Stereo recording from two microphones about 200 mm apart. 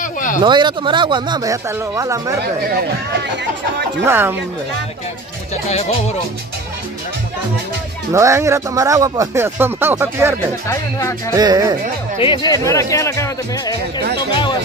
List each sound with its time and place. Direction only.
0.0 s a sound: 40° left (ahead or behind)
0.4 s speech: 25° right (ahead or behind)
4.0 s speech: 10° right (ahead or behind)
5.7 s speech: 30° left (ahead or behind)
8.1 s speech: 15° right (ahead or behind)
10.7 s speech: 15° left (ahead or behind)
11.3 s speech: 20° right (ahead or behind)
12.2 s speech: 25° left (ahead or behind)